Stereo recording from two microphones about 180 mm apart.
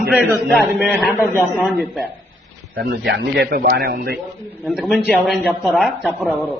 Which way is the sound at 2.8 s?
60° right (ahead or behind).